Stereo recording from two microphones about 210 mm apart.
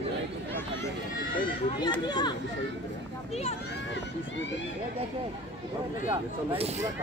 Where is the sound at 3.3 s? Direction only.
30° left (ahead or behind).